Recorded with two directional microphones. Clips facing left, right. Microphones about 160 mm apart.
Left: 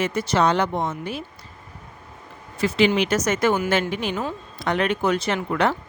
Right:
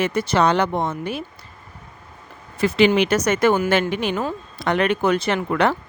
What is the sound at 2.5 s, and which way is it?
A woman's voice, 55° right (ahead or behind).